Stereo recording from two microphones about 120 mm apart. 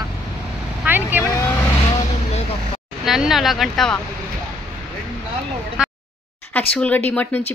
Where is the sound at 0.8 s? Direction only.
15° right (ahead or behind).